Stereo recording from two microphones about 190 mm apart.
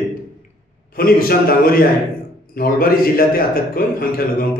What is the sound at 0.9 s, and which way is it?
A man's voice, 50° left (ahead or behind).